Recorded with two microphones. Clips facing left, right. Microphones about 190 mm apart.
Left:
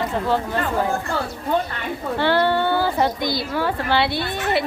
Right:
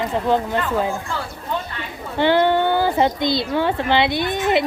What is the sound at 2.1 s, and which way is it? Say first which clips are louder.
A woman's voice: right 3 dB; 15° right (ahead or behind).